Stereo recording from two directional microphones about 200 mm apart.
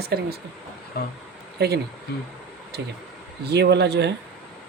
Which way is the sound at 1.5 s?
55° right (ahead or behind).